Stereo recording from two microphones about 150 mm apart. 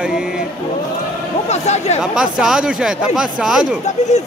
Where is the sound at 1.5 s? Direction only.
50° left (ahead or behind).